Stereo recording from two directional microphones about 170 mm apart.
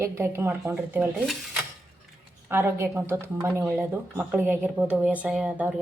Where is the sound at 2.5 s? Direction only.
15° right (ahead or behind).